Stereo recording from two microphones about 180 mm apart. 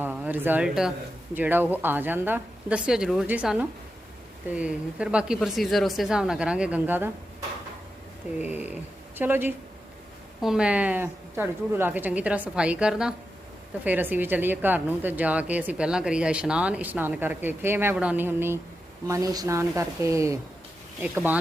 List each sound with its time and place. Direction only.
0.0 s a woman's voice: 10° right (ahead or behind)
8.4 s a woman's voice: 10° right (ahead or behind)